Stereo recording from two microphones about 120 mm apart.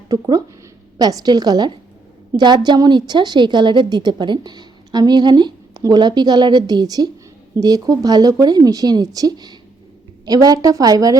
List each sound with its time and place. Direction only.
0.1 s a woman's voice: 30° right (ahead or behind)